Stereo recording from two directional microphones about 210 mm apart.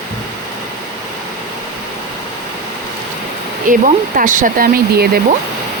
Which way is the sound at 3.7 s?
40° right (ahead or behind).